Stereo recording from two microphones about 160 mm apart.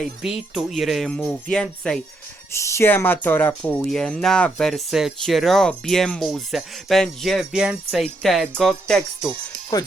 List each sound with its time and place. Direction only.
0.0 s speech: 5° right (ahead or behind)
2.5 s speech: 15° left (ahead or behind); by 9.3 s centre (ahead or behind)
9.7 s speech: 25° left (ahead or behind)